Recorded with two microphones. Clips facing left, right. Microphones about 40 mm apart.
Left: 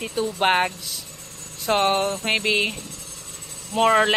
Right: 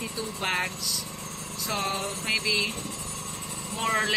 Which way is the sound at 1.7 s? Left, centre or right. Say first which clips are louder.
Left 10 dB; left.